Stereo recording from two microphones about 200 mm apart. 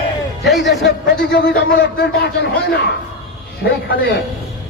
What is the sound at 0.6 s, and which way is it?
A man's voice, 60° left (ahead or behind).